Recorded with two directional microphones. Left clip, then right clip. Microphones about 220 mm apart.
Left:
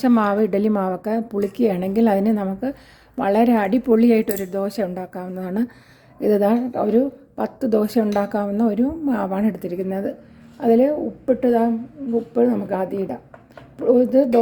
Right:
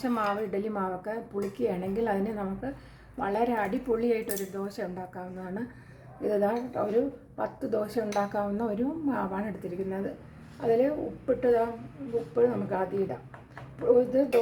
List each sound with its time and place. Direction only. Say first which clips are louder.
0.0 s a woman's voice: left 11 dB; 40° left (ahead or behind)